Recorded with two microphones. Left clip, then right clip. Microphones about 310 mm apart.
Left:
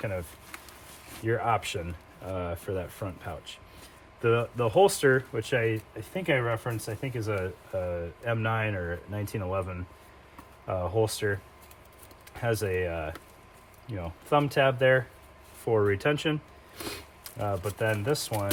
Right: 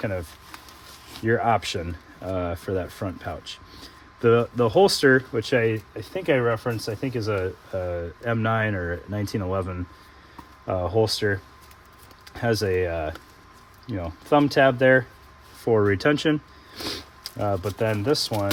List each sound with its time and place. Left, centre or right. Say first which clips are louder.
1.2 s speech: right 6 dB; right